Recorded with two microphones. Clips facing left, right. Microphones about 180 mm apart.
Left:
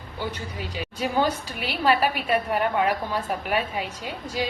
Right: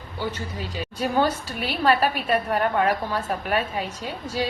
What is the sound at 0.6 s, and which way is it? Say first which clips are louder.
A woman's voice: right 1 dB; 10° left (ahead or behind).